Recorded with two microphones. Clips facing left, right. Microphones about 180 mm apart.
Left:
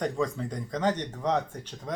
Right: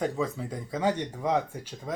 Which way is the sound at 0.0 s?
5° right (ahead or behind).